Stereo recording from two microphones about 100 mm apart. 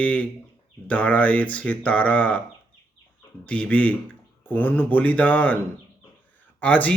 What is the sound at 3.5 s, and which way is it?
Speech, 15° left (ahead or behind).